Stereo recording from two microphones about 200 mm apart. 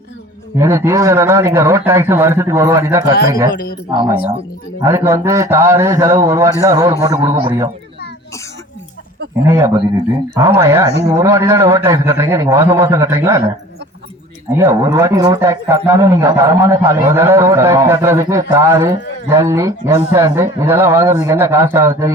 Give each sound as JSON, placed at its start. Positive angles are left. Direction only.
{"t": 0.5, "sound": "a man's voice", "side_deg": -15}
{"t": 4.8, "sound": "a man's voice", "side_deg": -15}
{"t": 9.5, "sound": "a man's voice", "side_deg": -15}
{"t": 14.5, "sound": "a man's voice", "side_deg": -15}